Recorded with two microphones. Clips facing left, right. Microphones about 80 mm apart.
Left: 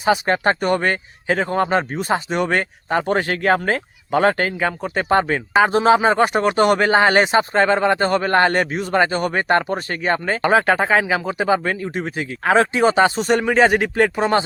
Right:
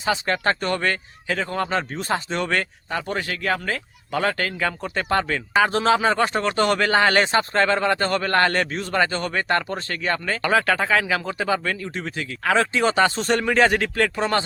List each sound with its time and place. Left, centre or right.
0.0 s speech: left
2.9 s speech: left; by 13.1 s centre
13.1 s speech: centre